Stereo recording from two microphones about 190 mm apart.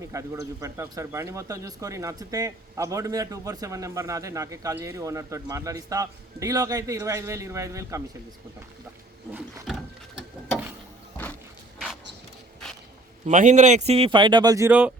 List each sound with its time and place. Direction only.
0.0 s speech: 15° right (ahead or behind)
9.6 s gears: centre (ahead or behind)
13.2 s speech: 40° right (ahead or behind); by 14.7 s 20° right (ahead or behind)
14.7 s speech: 5° right (ahead or behind)